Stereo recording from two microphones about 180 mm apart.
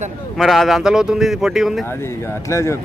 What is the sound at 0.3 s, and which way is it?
Speech, centre (ahead or behind).